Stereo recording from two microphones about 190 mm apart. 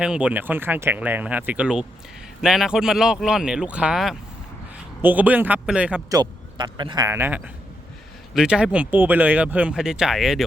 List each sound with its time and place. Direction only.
0.0 s speech: 5° right (ahead or behind)
6.1 s a man's voice: 20° right (ahead or behind); by 10.4 s centre (ahead or behind)